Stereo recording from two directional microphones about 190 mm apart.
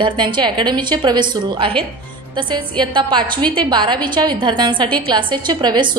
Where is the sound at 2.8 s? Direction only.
25° right (ahead or behind).